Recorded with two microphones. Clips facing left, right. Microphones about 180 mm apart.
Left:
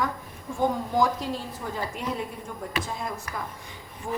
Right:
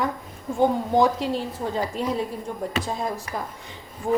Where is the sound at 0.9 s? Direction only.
25° right (ahead or behind).